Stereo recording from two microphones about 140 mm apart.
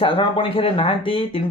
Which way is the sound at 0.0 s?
40° left (ahead or behind).